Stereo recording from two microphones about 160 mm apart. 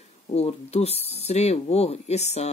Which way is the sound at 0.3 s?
40° left (ahead or behind).